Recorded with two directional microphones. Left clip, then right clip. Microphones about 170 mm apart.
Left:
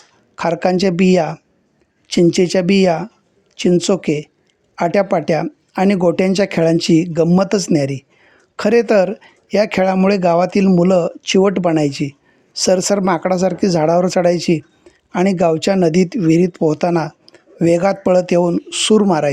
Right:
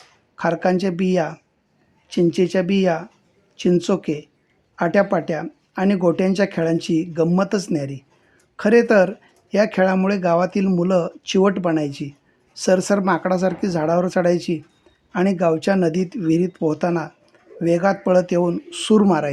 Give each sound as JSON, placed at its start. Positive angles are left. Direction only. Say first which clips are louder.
{"t": 0.3, "sound": "speech", "louder": "left 4 dB", "side_deg": 40}